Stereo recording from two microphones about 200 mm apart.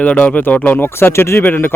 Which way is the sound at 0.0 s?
5° left (ahead or behind).